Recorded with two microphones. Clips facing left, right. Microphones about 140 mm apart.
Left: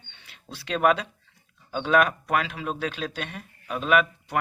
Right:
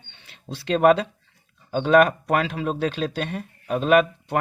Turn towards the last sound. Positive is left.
turn(degrees=-35)  # may be behind; listen again after turning